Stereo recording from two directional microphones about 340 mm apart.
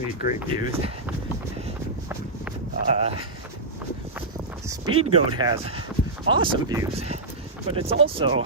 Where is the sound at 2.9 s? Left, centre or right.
Centre.